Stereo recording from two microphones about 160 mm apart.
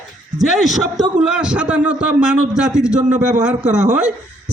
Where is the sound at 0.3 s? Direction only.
Centre (ahead or behind).